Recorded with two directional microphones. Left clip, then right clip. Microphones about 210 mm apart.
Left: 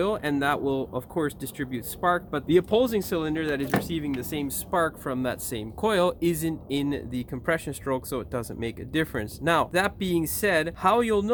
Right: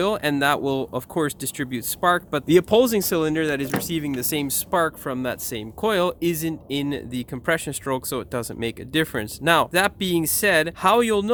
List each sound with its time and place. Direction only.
0.0 s speech: 45° right (ahead or behind)